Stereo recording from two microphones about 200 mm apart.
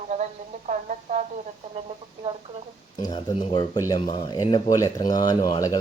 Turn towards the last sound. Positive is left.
turn(degrees=20)  # may be behind; listen again after turning